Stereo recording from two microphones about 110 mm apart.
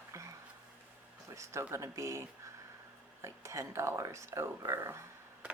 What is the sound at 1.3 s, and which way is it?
Speech, 25° right (ahead or behind).